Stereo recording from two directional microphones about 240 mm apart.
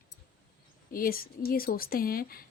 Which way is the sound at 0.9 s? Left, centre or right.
Left.